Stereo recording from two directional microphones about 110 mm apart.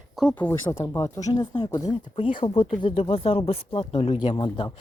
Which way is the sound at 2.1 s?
55° left (ahead or behind).